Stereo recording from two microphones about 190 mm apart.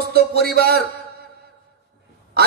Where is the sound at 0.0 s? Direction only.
55° right (ahead or behind).